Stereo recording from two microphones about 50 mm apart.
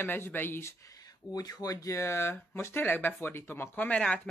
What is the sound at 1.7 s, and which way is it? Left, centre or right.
Speech, left.